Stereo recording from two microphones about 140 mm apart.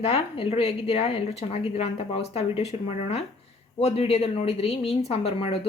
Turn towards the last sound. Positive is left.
turn(degrees=45)  # may be behind; listen again after turning